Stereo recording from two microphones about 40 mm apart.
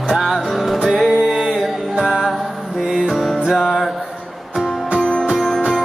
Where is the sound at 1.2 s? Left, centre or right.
Centre.